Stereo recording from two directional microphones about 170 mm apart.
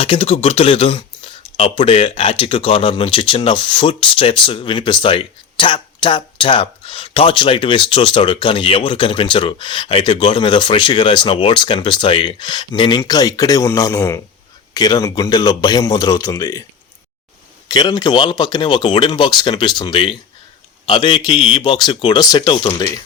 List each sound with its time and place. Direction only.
0.0 s speech: 35° left (ahead or behind)
17.7 s speech: 25° left (ahead or behind)